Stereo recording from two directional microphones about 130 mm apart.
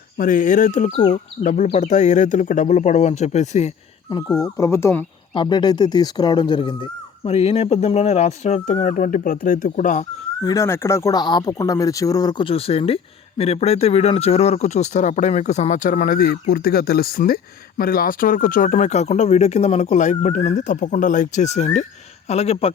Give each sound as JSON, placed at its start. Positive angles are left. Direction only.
{"t": 0.2, "sound": "speech", "side_deg": 90}
{"t": 4.4, "sound": "speech", "side_deg": 25}
{"t": 5.3, "sound": "speech", "side_deg": 35}
{"t": 10.4, "sound": "speech", "side_deg": 25}
{"t": 11.2, "sound": "a man's voice", "side_deg": 30}
{"t": 22.3, "sound": "speech", "side_deg": 50}